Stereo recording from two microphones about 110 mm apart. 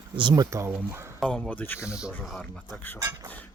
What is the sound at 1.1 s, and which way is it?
Speech, 5° left (ahead or behind).